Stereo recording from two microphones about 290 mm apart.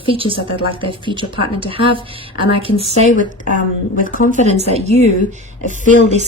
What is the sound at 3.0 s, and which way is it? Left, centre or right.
A woman's voice, left.